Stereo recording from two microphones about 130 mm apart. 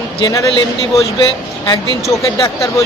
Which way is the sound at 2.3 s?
25° left (ahead or behind).